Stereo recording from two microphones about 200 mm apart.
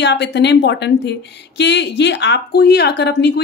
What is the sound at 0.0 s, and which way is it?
Speech, 60° left (ahead or behind).